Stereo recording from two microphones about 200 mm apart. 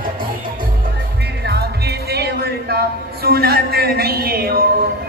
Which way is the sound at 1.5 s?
55° right (ahead or behind).